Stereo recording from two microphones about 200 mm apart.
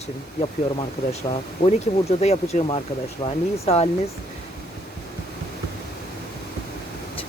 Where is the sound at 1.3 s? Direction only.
30° left (ahead or behind).